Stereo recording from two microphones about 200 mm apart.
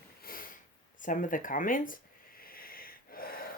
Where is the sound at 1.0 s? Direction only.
40° left (ahead or behind).